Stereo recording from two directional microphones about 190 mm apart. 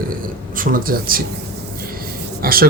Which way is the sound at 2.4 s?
50° right (ahead or behind).